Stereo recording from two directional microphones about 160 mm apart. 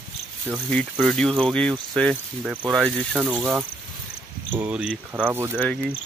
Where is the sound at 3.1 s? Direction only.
10° right (ahead or behind).